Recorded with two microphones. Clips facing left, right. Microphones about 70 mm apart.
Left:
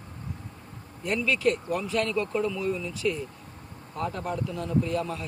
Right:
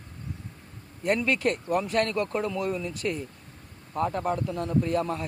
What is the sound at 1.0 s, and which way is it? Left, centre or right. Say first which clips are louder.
Speech: even; right.